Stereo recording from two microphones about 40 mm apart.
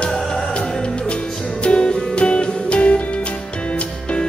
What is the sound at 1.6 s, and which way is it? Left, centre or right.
Music, left.